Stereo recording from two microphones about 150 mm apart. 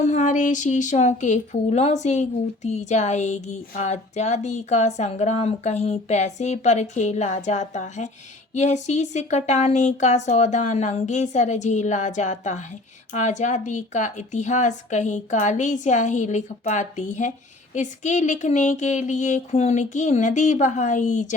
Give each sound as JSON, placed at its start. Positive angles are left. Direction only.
{"t": 0.0, "sound": "speech", "side_deg": 50}